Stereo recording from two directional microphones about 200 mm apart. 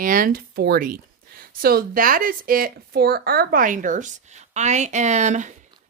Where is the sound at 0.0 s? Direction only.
45° right (ahead or behind).